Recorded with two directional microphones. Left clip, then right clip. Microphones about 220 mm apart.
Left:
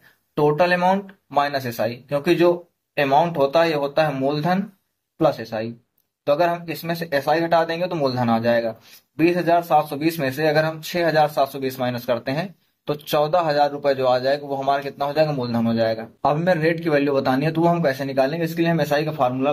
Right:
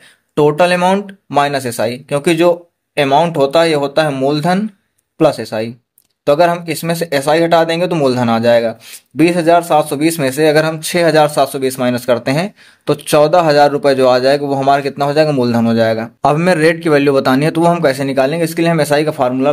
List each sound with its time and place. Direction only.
0.3 s speech: 55° right (ahead or behind)